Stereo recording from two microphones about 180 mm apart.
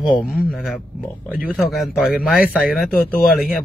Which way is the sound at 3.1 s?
55° left (ahead or behind).